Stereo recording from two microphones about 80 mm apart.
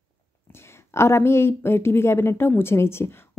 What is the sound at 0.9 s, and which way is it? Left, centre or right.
A woman's voice, left.